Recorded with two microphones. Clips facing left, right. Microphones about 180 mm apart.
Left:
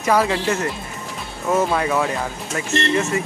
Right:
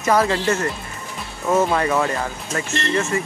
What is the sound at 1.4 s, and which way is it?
Speech, 5° left (ahead or behind).